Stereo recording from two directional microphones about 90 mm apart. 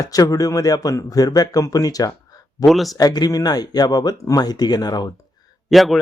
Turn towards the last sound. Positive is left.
turn(degrees=0)  # may be behind; listen again after turning